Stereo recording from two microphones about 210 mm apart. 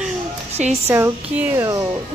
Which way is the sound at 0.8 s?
10° right (ahead or behind).